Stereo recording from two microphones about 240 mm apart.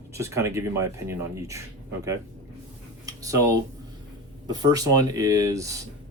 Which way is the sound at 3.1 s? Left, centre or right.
Centre.